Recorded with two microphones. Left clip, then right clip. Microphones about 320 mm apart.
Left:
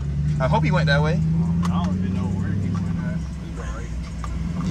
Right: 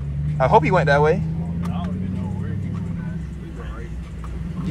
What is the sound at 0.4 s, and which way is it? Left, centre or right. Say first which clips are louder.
Speech: right 7 dB; centre.